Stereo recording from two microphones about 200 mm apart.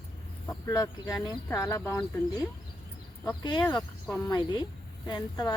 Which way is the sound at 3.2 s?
20° left (ahead or behind).